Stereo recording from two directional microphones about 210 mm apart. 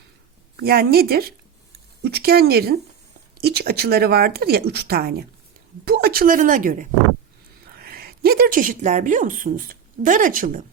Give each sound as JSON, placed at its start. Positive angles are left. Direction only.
{"t": 0.6, "sound": "a woman's voice", "side_deg": -45}